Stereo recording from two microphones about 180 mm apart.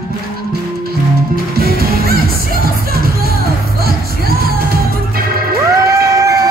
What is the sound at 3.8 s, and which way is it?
Music, 55° right (ahead or behind).